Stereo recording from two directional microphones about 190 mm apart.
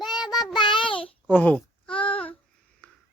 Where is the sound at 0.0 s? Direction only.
20° left (ahead or behind).